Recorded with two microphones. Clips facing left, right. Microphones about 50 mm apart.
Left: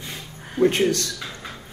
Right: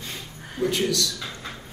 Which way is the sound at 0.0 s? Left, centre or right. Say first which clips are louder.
Left 1 dB; left.